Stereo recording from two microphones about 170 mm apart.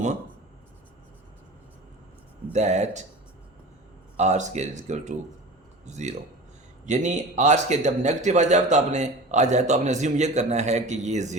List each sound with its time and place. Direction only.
2.5 s speech: 40° right (ahead or behind)
4.2 s speech: 45° right (ahead or behind)